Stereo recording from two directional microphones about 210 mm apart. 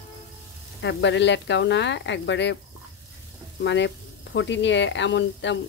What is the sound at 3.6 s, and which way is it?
Speech, 60° left (ahead or behind).